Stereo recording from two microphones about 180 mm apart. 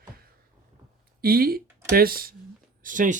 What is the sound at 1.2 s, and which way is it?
Speech, 55° right (ahead or behind).